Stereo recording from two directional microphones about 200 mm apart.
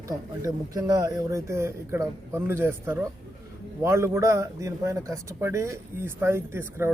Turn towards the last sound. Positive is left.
turn(degrees=-10)  # may be behind; listen again after turning